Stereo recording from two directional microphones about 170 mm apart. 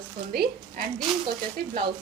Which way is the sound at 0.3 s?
60° right (ahead or behind).